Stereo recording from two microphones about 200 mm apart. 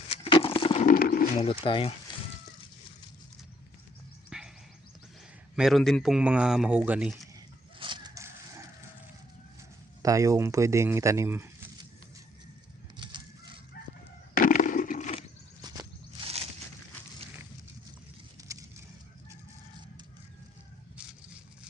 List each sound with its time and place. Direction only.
0.1 s a sound: 25° left (ahead or behind)
0.9 s roaring cats: 45° left (ahead or behind)
1.4 s speech: 25° left (ahead or behind)
4.3 s a sound: 5° right (ahead or behind)
5.5 s speech: centre (ahead or behind)
7.3 s chicken: 25° right (ahead or behind)
10.0 s speech: 15° right (ahead or behind)
13.0 s fowl: 25° right (ahead or behind)
14.3 s a sound: 40° left (ahead or behind)
15.6 s walk: 25° right (ahead or behind)